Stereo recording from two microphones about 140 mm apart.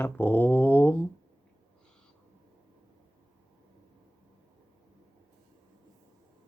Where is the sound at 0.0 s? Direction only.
10° left (ahead or behind).